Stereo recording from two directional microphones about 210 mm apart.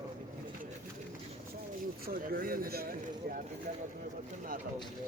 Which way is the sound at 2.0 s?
45° right (ahead or behind).